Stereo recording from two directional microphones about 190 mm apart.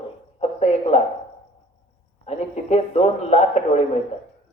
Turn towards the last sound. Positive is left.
turn(degrees=35)  # may be behind; listen again after turning